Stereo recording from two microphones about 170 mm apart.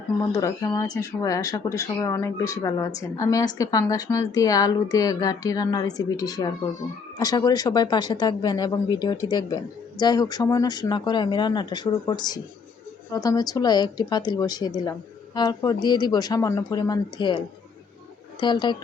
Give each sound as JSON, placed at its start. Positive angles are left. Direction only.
{"t": 0.3, "sound": "speech", "side_deg": 20}